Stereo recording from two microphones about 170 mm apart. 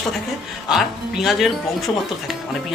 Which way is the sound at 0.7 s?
Centre (ahead or behind).